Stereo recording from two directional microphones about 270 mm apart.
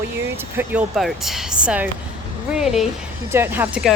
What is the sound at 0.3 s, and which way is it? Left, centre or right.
A woman's voice, centre.